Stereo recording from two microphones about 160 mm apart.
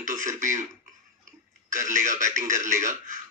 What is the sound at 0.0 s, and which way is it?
Tick-tock, 50° right (ahead or behind).